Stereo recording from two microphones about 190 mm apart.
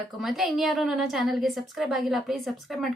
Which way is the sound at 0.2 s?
Centre (ahead or behind).